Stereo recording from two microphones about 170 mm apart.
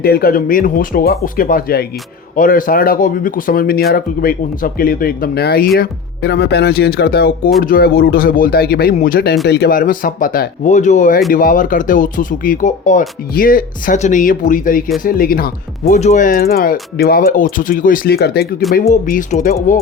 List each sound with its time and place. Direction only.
0.0 s speech: 65° left (ahead or behind)
15.8 s speech: 40° left (ahead or behind); by 18.4 s 65° left (ahead or behind)
18.7 s speech: 55° left (ahead or behind)